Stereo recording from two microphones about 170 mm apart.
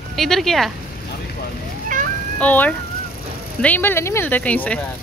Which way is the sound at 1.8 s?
50° right (ahead or behind).